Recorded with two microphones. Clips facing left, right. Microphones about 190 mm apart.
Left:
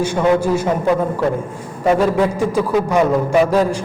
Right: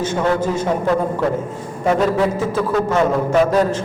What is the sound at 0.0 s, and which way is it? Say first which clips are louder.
Speech: left 3 dB; 10° left (ahead or behind).